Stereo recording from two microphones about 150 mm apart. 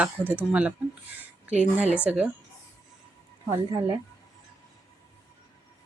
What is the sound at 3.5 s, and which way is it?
Speech, 25° right (ahead or behind).